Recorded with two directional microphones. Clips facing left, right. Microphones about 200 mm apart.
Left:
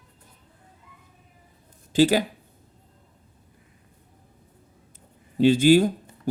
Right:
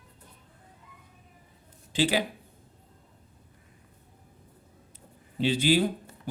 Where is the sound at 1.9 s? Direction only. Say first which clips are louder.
Left 7 dB; 45° left (ahead or behind).